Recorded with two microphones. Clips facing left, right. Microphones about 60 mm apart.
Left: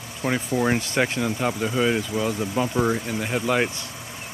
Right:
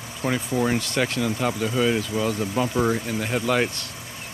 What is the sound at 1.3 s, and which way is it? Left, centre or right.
Speech, centre.